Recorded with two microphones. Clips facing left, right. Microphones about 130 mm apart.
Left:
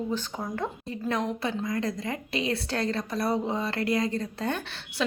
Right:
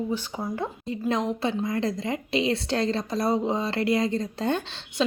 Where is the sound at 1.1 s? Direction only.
25° right (ahead or behind).